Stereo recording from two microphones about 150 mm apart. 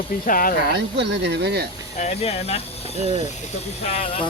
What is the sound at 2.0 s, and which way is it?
Speech, 45° left (ahead or behind).